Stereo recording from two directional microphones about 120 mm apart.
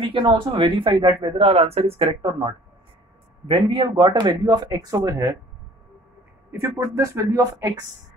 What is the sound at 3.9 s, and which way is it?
Speech, 35° right (ahead or behind).